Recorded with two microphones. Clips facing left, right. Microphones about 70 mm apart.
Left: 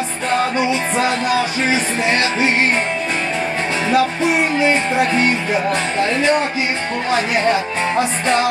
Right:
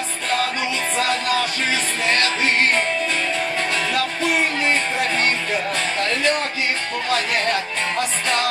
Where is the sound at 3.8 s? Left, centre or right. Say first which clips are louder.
Left 6 dB; centre.